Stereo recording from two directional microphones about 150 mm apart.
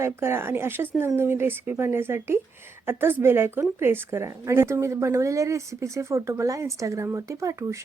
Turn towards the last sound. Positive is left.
turn(degrees=-20)  # may be behind; listen again after turning